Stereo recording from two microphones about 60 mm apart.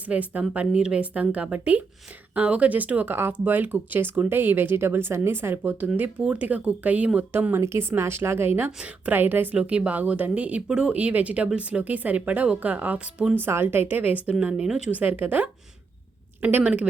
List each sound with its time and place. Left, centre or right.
0.1 s speech: right
6.0 s speech: right
7.5 s speech: right
9.6 s speech: right
13.3 s speech: right
13.8 s speech: right